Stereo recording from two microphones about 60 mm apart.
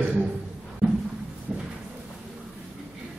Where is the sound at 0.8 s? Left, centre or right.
Centre.